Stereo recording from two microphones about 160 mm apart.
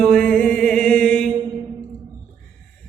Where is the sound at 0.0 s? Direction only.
5° left (ahead or behind).